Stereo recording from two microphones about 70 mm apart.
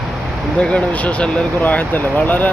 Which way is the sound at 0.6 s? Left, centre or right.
Centre.